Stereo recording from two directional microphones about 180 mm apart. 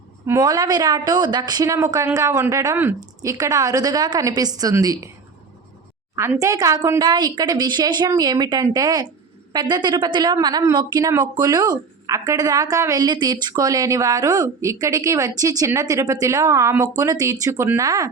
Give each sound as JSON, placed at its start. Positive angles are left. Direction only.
{"t": 0.3, "sound": "a woman's voice", "side_deg": -20}
{"t": 6.4, "sound": "a woman's voice", "side_deg": -20}